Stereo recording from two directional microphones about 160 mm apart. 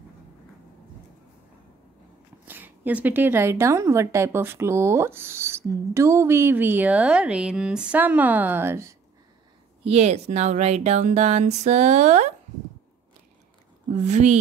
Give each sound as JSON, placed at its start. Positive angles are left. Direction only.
{"t": 2.4, "sound": "a woman's voice", "side_deg": -10}
{"t": 9.8, "sound": "speech", "side_deg": -40}
{"t": 14.0, "sound": "speech", "side_deg": -45}